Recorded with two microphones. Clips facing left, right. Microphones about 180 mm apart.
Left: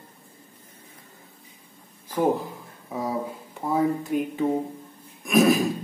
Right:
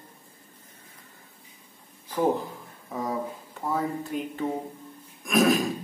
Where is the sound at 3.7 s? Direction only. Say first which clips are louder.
Left 6 dB; 15° left (ahead or behind).